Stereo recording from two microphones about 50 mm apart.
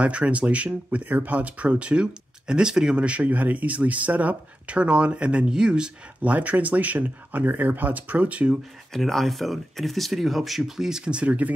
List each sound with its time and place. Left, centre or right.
0.0 s speech: right
3.1 s speech: right
6.2 s speech: right
8.9 s speech: centre
11.1 s speech: right